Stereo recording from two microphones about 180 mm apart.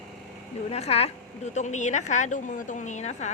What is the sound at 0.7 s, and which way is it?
A woman's voice, 35° left (ahead or behind).